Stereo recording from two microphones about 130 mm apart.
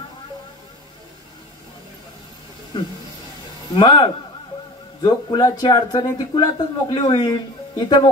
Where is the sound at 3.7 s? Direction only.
30° left (ahead or behind).